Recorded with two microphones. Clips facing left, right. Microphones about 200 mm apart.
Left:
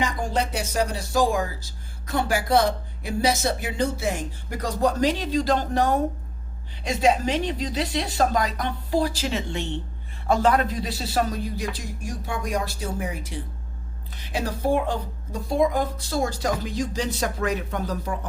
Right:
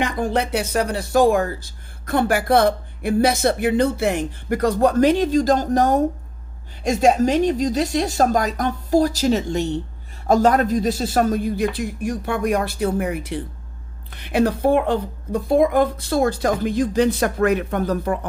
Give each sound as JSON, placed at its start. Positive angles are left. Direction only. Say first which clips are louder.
{"t": 0.0, "sound": "speech", "louder": "right 4 dB", "side_deg": -60}